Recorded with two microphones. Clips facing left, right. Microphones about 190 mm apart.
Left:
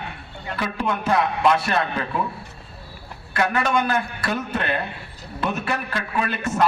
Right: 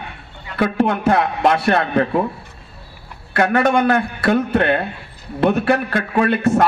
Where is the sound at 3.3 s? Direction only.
60° right (ahead or behind).